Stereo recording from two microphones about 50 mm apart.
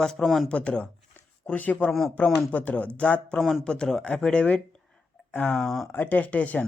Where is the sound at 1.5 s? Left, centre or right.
Left.